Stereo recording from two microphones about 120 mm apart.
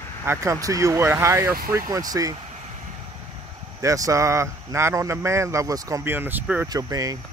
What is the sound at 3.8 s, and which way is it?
A man's voice, 25° right (ahead or behind).